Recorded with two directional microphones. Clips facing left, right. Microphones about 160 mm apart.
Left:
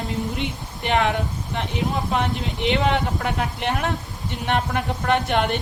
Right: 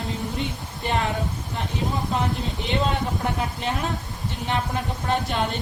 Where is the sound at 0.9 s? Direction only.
75° left (ahead or behind).